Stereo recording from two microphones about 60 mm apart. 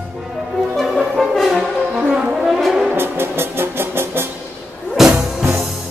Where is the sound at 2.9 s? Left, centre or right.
Right.